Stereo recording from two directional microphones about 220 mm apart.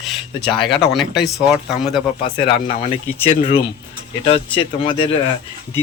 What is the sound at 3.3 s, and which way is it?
Speech, 25° left (ahead or behind).